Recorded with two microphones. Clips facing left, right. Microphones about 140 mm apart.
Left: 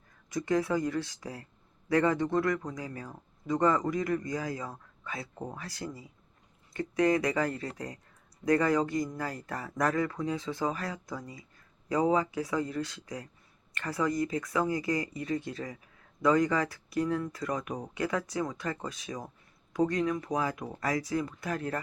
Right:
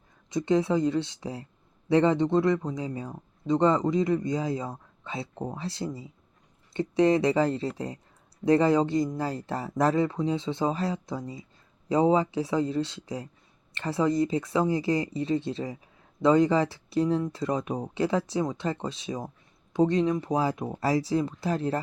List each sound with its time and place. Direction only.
0.3 s speech: 25° right (ahead or behind)